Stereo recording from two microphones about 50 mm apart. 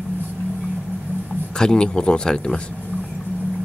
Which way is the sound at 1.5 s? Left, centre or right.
Centre.